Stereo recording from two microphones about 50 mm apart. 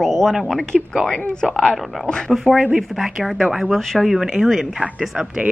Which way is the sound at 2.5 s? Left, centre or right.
Right.